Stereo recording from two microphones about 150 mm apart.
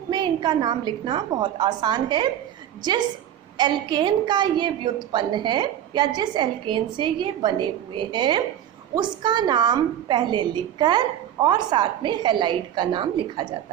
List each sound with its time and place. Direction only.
0.1 s a woman's voice: 30° right (ahead or behind)